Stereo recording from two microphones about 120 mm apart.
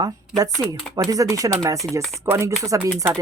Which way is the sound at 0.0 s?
30° right (ahead or behind).